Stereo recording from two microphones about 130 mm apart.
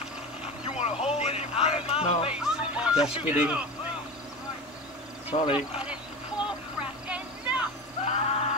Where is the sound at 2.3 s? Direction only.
10° right (ahead or behind).